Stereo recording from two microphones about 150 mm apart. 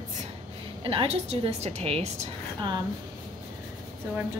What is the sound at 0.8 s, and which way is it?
A woman's voice, 40° right (ahead or behind).